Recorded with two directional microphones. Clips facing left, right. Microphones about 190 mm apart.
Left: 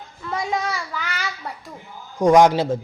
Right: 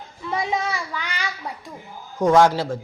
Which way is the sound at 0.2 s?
5° right (ahead or behind).